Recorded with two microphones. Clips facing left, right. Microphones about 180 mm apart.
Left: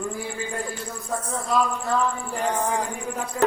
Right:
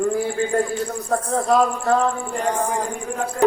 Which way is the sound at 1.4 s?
40° right (ahead or behind).